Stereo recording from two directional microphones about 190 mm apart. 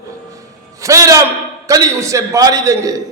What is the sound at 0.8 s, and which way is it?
A man's voice, 15° right (ahead or behind).